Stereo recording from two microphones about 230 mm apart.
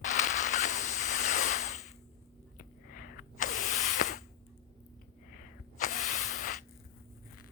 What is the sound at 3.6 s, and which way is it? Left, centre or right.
Spray, left.